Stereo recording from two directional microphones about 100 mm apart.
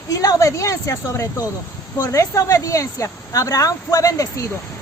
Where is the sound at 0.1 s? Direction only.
35° left (ahead or behind).